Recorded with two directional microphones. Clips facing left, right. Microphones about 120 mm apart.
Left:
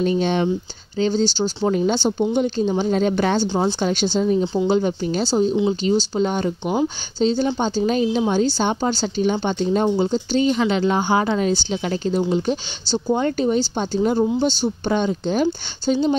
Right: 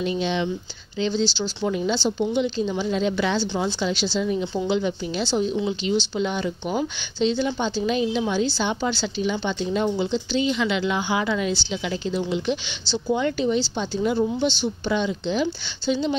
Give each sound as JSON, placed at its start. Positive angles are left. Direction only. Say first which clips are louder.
{"t": 0.0, "sound": "speech", "louder": "left 5 dB", "side_deg": 45}